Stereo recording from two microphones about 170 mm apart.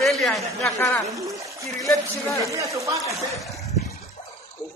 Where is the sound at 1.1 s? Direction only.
20° right (ahead or behind).